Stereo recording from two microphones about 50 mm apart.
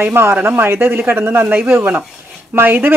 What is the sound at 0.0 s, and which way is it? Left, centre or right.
Speech, right.